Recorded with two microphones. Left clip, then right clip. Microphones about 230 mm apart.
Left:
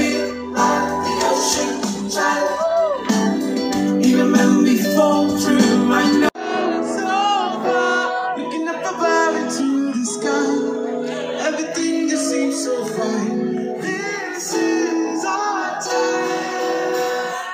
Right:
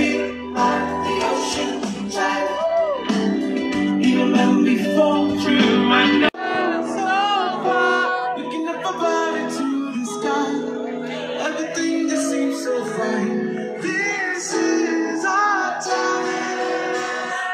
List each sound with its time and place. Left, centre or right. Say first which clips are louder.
0.0 s music: left 1 dB; centre
7.1 s music: left 1 dB; centre
9.0 s music: left 4 dB; left
11.4 s music: left 2 dB; left